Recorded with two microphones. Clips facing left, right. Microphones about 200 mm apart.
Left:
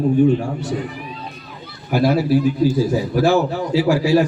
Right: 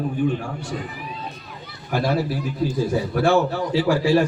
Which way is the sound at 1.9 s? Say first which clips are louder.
Left 7 dB; centre (ahead or behind).